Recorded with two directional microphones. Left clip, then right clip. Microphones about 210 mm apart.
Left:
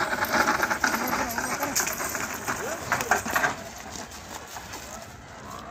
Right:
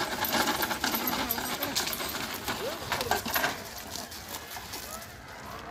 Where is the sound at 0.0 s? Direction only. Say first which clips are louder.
Left 5 dB; centre (ahead or behind).